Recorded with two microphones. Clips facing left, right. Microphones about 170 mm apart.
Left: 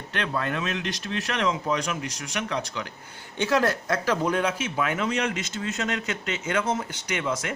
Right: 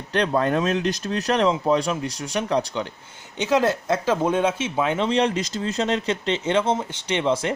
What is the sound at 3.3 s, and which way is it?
Speech, 20° right (ahead or behind).